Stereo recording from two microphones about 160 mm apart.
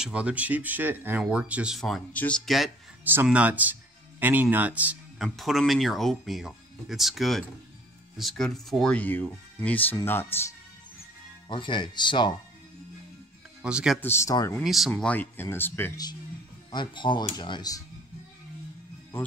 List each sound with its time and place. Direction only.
0.0 s speech: 5° right (ahead or behind)
3.0 s music: 10° right (ahead or behind)
3.3 s speech: 10° right (ahead or behind); by 10.5 s 15° left (ahead or behind)
11.4 s speech: 30° left (ahead or behind)
13.6 s speech: 5° right (ahead or behind)
14.0 s speech: 15° left (ahead or behind)
14.6 s speech: centre (ahead or behind)
16.7 s speech: 30° left (ahead or behind)